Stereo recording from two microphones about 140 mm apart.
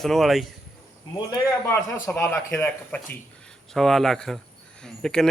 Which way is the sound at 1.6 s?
15° left (ahead or behind).